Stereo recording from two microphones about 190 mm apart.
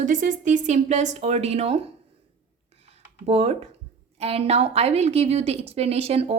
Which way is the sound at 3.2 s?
35° right (ahead or behind).